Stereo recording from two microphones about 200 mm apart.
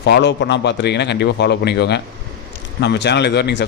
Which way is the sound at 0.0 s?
60° left (ahead or behind).